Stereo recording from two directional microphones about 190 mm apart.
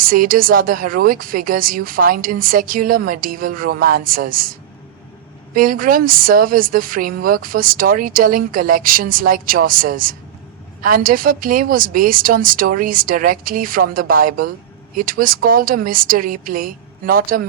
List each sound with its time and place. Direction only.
0.0 s a woman's voice: 50° right (ahead or behind)
5.5 s a woman's voice: 50° right (ahead or behind)